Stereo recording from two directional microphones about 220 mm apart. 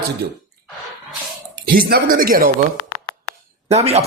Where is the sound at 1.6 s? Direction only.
45° right (ahead or behind).